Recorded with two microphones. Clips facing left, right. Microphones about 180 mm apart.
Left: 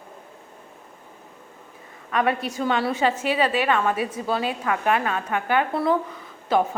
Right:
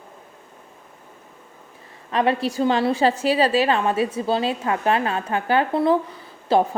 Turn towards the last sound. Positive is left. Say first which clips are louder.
# right 3 dB
turn(degrees=-30)  # may be behind; listen again after turning